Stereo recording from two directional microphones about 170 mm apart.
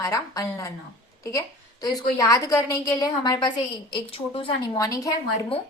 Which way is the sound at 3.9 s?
35° left (ahead or behind).